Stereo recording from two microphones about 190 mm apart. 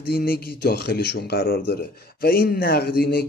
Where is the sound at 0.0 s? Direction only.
55° left (ahead or behind).